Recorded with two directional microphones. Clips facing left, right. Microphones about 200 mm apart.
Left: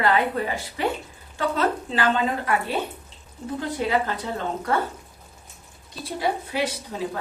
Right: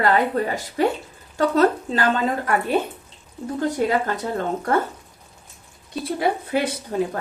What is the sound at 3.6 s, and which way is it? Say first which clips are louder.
A woman's voice: right 3 dB; 45° right (ahead or behind).